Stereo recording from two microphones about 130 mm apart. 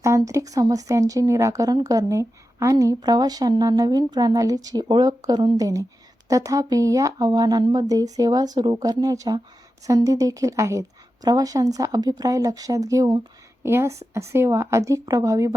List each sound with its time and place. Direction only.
0.0 s speech: 25° right (ahead or behind)